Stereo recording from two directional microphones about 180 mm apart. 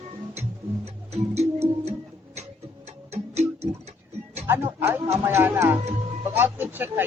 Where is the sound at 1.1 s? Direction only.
35° right (ahead or behind).